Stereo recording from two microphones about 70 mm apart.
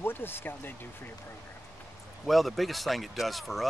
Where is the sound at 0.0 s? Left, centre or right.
Left.